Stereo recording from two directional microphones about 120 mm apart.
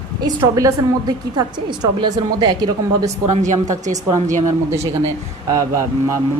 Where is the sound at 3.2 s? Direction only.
90° right.